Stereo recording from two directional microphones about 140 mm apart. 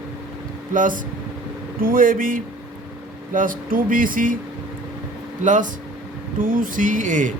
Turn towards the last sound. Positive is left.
turn(degrees=-65)  # may be behind; listen again after turning